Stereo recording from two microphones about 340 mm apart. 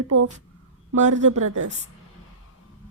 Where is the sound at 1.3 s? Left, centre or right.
Right.